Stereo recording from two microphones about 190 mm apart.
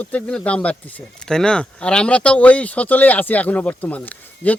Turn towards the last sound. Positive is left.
turn(degrees=10)  # may be behind; listen again after turning